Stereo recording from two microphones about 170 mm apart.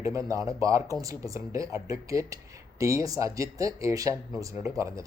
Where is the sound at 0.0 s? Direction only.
20° right (ahead or behind).